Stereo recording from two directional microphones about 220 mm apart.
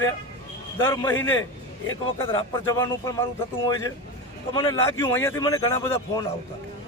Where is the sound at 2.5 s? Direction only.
15° left (ahead or behind).